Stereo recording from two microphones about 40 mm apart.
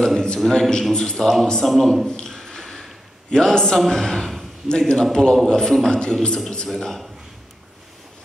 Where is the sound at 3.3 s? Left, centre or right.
Centre.